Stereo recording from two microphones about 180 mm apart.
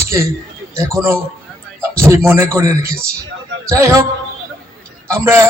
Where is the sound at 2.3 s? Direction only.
15° right (ahead or behind).